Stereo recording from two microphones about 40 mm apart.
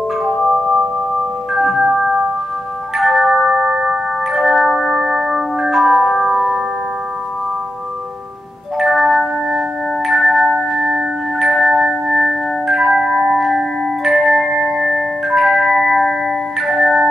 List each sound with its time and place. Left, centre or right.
0.2 s music: centre
3.4 s a sound: centre
4.9 s music: centre
8.7 s chime: centre